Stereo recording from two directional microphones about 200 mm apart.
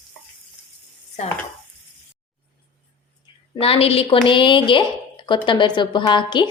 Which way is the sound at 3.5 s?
30° left (ahead or behind).